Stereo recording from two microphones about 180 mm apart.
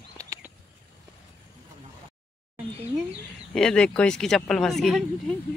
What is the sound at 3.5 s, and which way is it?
Speech, 5° left (ahead or behind).